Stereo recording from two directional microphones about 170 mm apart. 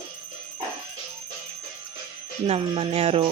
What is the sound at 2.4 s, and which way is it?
Speech, 35° right (ahead or behind).